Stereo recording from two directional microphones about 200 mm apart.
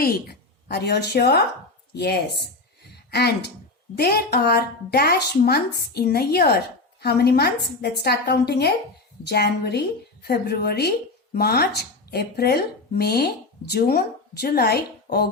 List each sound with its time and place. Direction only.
0.0 s a woman's voice: 50° left (ahead or behind)
2.9 s a sound: 55° left (ahead or behind)
3.9 s a woman's voice: 50° left (ahead or behind)